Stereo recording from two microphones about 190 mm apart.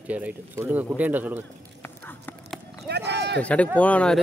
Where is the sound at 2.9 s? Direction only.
60° right (ahead or behind).